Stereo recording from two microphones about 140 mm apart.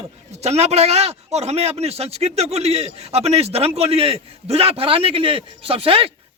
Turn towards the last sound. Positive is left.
turn(degrees=-40)  # may be behind; listen again after turning